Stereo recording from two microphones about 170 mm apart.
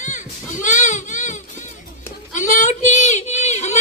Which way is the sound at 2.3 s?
50° left (ahead or behind).